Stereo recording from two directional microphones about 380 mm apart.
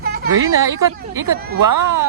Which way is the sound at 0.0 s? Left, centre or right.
Right.